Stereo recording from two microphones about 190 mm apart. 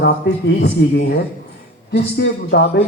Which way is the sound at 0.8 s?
70° left (ahead or behind).